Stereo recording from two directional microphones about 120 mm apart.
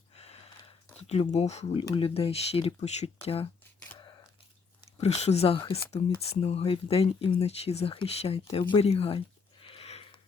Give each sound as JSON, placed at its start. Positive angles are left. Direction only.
{"t": 0.2, "sound": "a sound", "side_deg": 60}
{"t": 0.9, "sound": "speech", "side_deg": 60}
{"t": 2.0, "sound": "speech", "side_deg": 50}
{"t": 4.9, "sound": "speech", "side_deg": 60}